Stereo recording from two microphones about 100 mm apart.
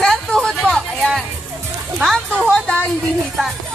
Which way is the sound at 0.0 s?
5° left (ahead or behind).